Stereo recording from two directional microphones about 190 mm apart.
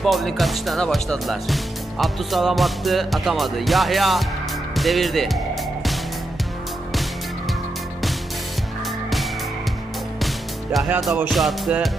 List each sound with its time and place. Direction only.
0.0 s speech: centre (ahead or behind)
10.2 s music: centre (ahead or behind)